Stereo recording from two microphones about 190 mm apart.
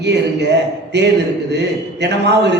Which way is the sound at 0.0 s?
65° right (ahead or behind).